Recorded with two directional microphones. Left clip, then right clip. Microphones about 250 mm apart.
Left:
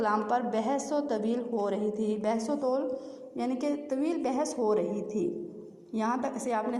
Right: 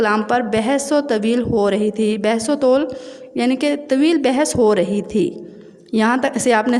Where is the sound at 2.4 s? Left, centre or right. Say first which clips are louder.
Right 14 dB; right.